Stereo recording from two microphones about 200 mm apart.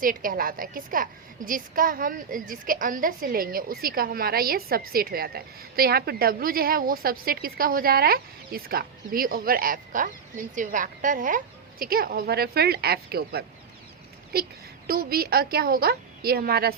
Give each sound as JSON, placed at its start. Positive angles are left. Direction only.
{"t": 0.0, "sound": "a woman's voice", "side_deg": -45}